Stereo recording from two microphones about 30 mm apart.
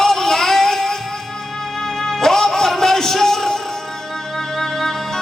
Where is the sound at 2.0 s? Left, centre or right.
Centre.